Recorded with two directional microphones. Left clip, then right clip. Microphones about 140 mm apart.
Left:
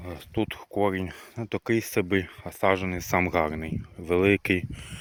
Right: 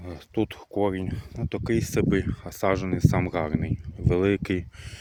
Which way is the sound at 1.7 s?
30° right (ahead or behind).